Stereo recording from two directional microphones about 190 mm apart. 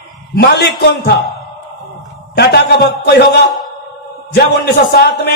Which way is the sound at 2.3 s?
60° left (ahead or behind).